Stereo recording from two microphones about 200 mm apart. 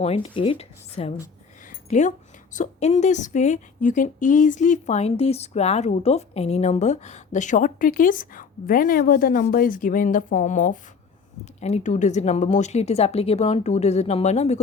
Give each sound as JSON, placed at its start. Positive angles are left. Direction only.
{"t": 0.0, "sound": "a woman's voice", "side_deg": 30}